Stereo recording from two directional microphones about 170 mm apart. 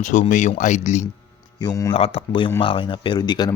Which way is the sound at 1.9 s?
35° left (ahead or behind).